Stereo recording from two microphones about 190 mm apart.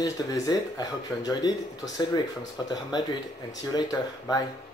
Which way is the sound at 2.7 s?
20° left (ahead or behind).